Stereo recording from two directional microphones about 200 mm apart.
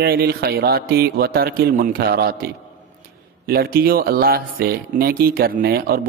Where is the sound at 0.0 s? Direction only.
50° right (ahead or behind).